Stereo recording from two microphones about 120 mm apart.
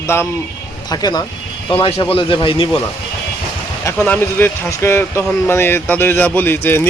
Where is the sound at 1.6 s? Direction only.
50° left (ahead or behind).